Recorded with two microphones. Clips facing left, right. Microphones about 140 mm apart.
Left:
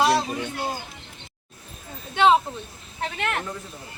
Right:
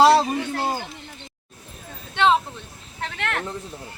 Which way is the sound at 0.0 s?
35° right (ahead or behind).